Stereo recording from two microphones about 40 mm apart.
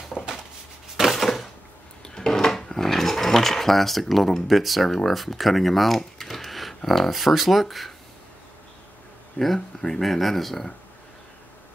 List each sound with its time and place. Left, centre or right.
0.9 s a sound: centre
2.0 s mechanisms: centre
6.9 s speech: centre
9.4 s speech: left
9.8 s speech: centre